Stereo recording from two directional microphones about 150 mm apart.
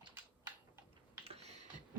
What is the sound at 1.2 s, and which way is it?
Typing, 40° right (ahead or behind).